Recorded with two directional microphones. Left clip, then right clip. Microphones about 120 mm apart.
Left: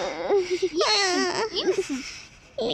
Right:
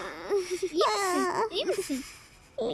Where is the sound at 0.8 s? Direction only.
10° right (ahead or behind).